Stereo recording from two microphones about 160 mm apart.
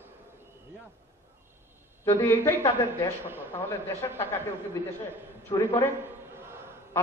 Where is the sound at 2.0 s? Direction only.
15° left (ahead or behind).